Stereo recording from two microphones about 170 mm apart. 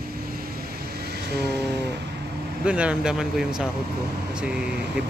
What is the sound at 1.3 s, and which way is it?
Vehicle, 75° right (ahead or behind).